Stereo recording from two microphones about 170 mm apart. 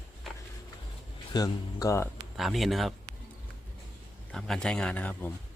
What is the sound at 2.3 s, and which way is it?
Speech, centre (ahead or behind).